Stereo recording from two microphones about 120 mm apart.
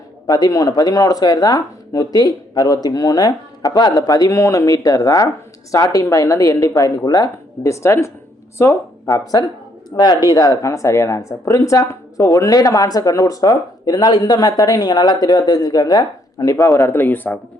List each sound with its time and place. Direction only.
0.3 s speech: 30° left (ahead or behind)
9.9 s speech: 35° left (ahead or behind); by 17.3 s 15° left (ahead or behind)